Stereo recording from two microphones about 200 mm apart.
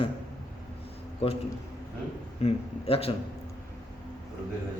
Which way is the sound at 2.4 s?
30° left (ahead or behind).